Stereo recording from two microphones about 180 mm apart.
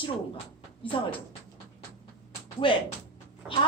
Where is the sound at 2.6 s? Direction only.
30° left (ahead or behind).